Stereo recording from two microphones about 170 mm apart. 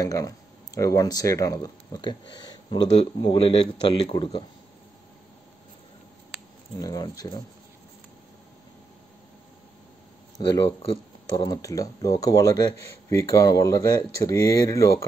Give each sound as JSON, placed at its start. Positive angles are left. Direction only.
{"t": 0.0, "sound": "speech", "side_deg": 20}
{"t": 6.8, "sound": "speech", "side_deg": 20}
{"t": 10.4, "sound": "speech", "side_deg": 25}